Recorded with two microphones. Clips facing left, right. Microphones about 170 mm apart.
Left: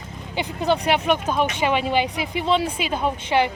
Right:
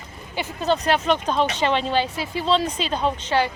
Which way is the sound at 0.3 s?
15° left (ahead or behind).